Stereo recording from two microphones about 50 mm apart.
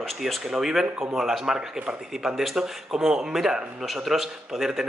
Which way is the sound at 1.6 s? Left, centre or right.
Centre.